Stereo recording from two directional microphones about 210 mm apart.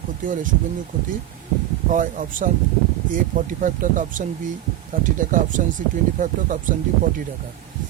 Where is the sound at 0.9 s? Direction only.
40° right (ahead or behind).